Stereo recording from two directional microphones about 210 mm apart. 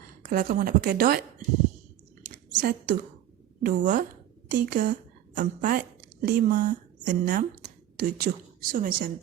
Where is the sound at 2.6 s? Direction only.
45° right (ahead or behind).